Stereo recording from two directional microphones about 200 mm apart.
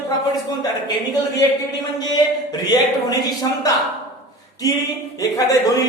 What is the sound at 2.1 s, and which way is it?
A man's voice, 20° left (ahead or behind).